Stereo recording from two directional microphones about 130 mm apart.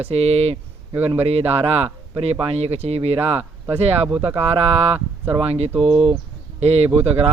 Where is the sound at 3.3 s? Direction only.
15° right (ahead or behind).